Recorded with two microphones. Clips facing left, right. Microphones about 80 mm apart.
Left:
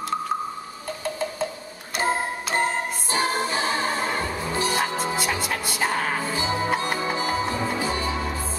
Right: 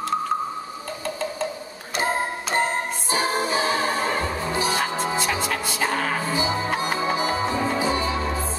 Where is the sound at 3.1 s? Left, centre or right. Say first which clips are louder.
Right 1 dB; centre.